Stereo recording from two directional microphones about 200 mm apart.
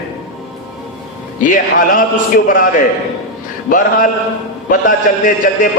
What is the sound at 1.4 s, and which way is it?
A man's voice, 40° left (ahead or behind).